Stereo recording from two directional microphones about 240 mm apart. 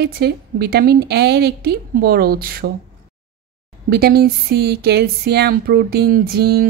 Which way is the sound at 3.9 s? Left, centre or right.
Right.